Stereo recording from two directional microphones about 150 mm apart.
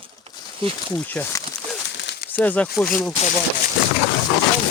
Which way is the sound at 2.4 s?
10° left (ahead or behind).